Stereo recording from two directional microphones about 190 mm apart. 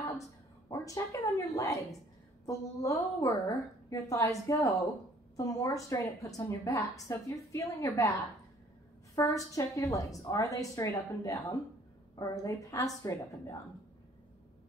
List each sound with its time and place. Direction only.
0.2 s a woman's voice: 20° left (ahead or behind)